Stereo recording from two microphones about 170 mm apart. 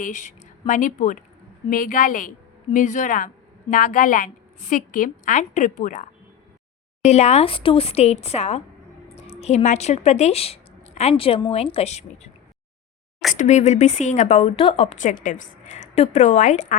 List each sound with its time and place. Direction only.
0.0 s a woman's voice: 45° left (ahead or behind)
13.3 s a woman's voice: 45° left (ahead or behind)